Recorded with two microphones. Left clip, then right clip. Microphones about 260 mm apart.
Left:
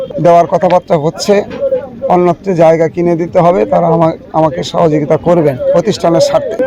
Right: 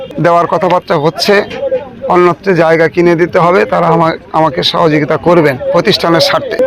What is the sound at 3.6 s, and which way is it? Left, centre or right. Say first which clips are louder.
Speech: even; right.